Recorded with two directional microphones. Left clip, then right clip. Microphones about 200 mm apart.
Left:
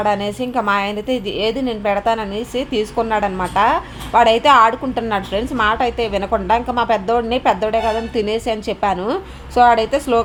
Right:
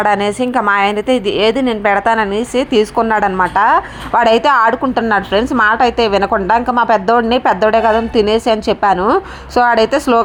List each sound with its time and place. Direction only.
0.0 s a woman's voice: 20° right (ahead or behind)